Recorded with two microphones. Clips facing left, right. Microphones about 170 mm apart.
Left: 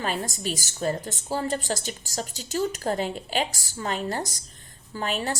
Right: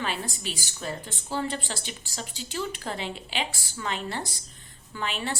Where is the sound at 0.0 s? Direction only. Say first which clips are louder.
Left 3 dB; 45° left (ahead or behind).